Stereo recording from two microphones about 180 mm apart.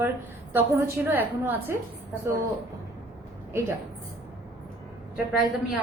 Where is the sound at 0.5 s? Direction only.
15° right (ahead or behind).